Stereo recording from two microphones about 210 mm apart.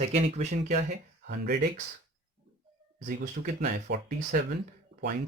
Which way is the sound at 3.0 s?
35° right (ahead or behind).